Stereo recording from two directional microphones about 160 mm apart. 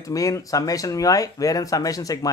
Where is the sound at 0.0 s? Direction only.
20° left (ahead or behind).